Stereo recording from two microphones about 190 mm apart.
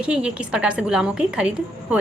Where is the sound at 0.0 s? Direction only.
5° right (ahead or behind).